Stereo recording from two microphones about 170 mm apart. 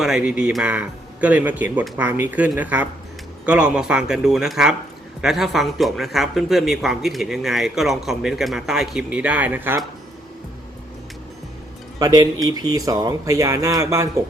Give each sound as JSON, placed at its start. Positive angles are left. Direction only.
{"t": 0.0, "sound": "a man's voice", "side_deg": -5}
{"t": 11.9, "sound": "speech", "side_deg": -20}